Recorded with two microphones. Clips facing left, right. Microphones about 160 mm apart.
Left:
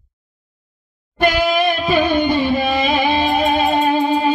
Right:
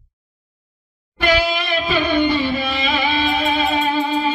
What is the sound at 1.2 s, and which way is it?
Music, 50° left (ahead or behind).